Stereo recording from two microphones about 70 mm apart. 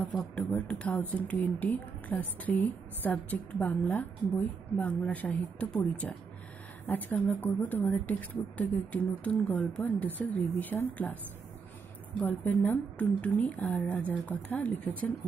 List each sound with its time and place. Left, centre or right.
0.2 s speech: centre
12.3 s speech: left